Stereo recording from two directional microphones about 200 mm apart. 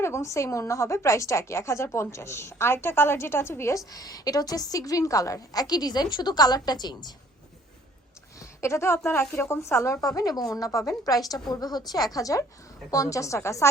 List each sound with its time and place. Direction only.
0.0 s a woman's voice: 15° left (ahead or behind)
8.4 s a woman's voice: 15° left (ahead or behind)